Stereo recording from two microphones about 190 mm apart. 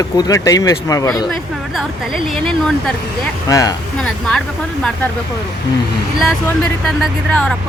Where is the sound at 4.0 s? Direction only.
5° left (ahead or behind).